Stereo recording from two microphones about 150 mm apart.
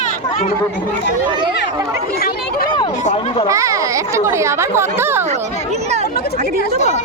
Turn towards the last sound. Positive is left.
turn(degrees=-15)  # may be behind; listen again after turning